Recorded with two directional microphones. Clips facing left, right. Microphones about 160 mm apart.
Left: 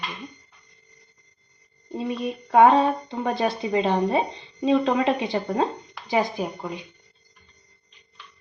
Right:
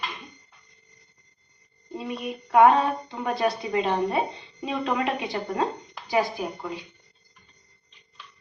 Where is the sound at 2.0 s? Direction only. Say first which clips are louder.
Left 4 dB; 30° left (ahead or behind).